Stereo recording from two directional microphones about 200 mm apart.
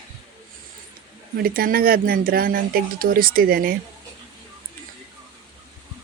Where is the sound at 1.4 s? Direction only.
45° right (ahead or behind).